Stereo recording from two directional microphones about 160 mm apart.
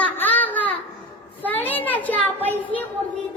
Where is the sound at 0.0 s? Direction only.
10° left (ahead or behind).